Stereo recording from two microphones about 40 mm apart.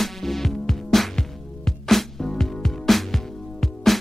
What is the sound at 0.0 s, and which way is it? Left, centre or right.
Music, centre.